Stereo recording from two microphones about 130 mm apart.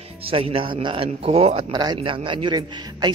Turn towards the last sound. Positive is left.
turn(degrees=-35)  # may be behind; listen again after turning